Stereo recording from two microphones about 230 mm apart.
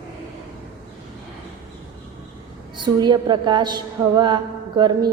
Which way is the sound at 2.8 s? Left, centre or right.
Centre.